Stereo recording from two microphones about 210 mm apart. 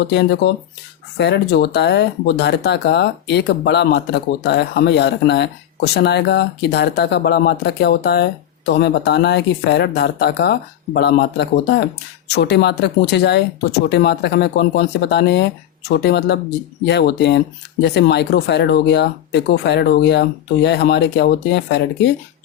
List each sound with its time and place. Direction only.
0.1 s speech: 55° left (ahead or behind)